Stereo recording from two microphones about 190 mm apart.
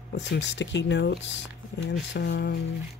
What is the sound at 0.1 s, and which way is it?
Speech, 70° left (ahead or behind).